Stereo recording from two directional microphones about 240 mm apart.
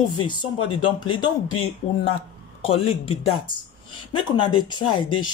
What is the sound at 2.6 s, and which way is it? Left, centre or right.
Speech, left.